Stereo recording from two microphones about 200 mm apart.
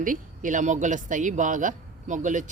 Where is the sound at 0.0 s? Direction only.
40° right (ahead or behind).